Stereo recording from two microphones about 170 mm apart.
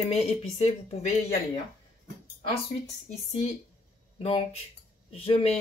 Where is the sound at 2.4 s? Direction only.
40° left (ahead or behind).